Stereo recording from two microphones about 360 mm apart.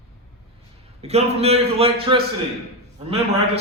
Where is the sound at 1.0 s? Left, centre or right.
Centre.